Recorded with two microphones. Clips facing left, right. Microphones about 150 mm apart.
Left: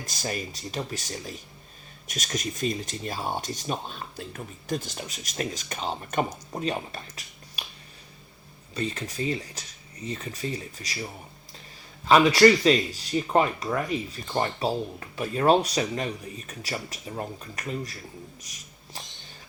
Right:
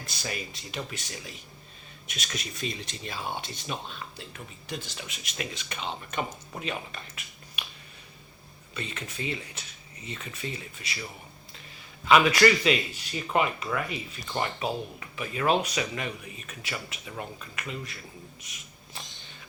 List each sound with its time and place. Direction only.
0.0 s speech: 40° left (ahead or behind)
8.7 s speech: 35° left (ahead or behind)